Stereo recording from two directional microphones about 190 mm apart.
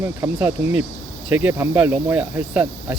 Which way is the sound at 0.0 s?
10° right (ahead or behind).